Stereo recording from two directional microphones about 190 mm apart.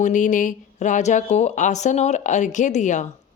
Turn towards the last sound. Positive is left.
turn(degrees=40)  # may be behind; listen again after turning